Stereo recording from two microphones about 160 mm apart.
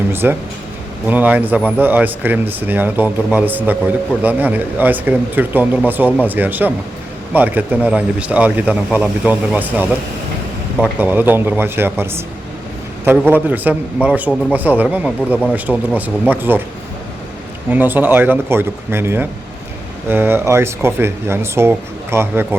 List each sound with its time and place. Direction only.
0.1 s speech: 15° right (ahead or behind)
13.3 s speech: 10° right (ahead or behind)
15.7 s speech: 5° left (ahead or behind)
16.3 s speech: 10° right (ahead or behind)
17.7 s speech: 10° right (ahead or behind)